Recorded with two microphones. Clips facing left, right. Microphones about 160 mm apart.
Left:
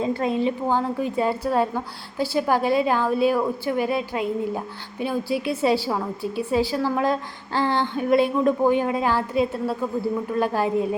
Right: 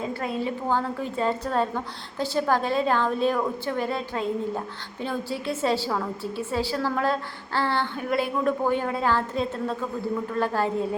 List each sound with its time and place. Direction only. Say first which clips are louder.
0.0 s a woman's voice: left 6 dB; 20° left (ahead or behind)